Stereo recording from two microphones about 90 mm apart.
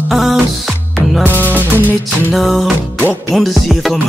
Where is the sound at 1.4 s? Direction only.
20° right (ahead or behind).